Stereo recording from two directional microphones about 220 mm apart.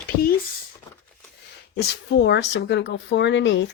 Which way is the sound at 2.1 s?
50° left (ahead or behind).